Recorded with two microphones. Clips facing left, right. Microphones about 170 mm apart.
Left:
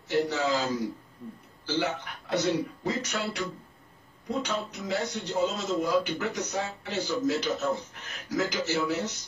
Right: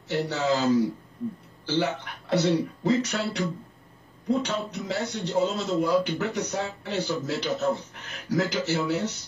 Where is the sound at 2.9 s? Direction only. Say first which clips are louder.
Right 8 dB; 30° right (ahead or behind).